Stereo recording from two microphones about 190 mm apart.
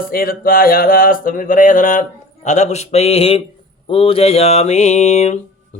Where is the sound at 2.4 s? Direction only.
40° left (ahead or behind).